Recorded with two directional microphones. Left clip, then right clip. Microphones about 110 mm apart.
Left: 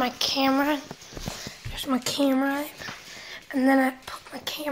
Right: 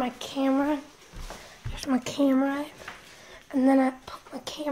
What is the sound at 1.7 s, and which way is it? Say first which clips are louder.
Speech: left 1 dB; 20° left (ahead or behind).